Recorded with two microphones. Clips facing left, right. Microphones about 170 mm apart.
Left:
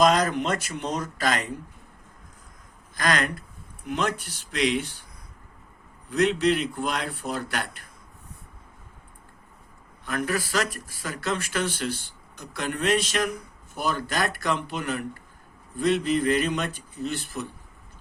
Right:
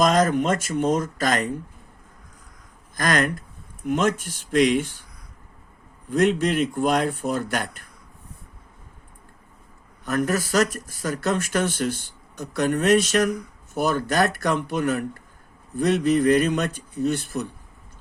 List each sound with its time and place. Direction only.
0.0 s speech: 45° right (ahead or behind)
2.9 s speech: 45° right (ahead or behind)
6.1 s speech: 50° right (ahead or behind)
10.1 s speech: 45° right (ahead or behind)